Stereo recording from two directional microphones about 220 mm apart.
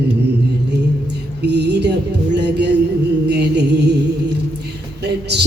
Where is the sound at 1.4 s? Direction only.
50° right (ahead or behind).